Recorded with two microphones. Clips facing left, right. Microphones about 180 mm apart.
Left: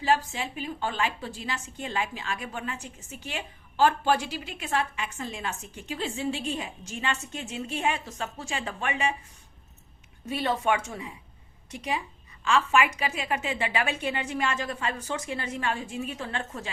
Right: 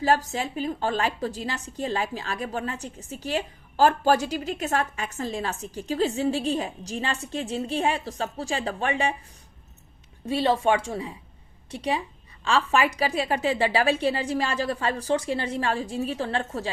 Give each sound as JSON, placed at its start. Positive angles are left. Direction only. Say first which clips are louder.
{"t": 0.0, "sound": "a woman's voice", "louder": "right 3 dB", "side_deg": -40}
{"t": 10.2, "sound": "a woman's voice", "louder": "right 5 dB", "side_deg": -30}